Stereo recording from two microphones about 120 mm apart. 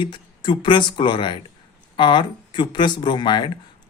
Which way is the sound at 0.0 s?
40° left (ahead or behind).